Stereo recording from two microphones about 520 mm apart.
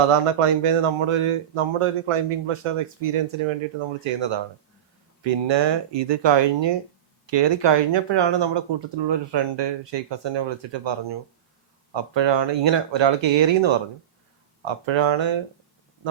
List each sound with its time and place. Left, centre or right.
0.3 s speech: right
4.0 s speech: right